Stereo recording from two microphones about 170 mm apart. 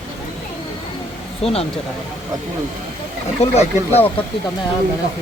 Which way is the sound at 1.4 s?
35° left (ahead or behind).